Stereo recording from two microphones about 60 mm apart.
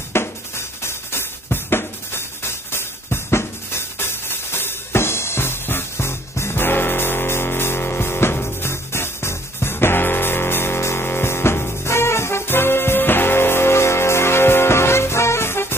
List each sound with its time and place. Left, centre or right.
0.1 s music: left